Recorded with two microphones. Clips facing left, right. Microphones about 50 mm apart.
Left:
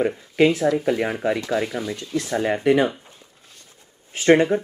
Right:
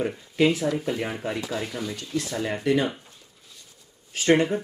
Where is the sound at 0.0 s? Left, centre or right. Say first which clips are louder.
Left 4 dB; left.